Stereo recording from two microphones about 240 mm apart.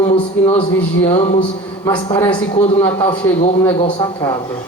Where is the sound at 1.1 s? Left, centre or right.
Left.